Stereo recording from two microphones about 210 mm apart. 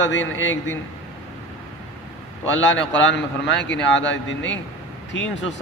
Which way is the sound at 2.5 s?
65° left (ahead or behind).